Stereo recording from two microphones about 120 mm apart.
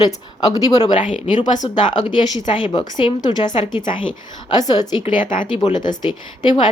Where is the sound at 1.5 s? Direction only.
90° left.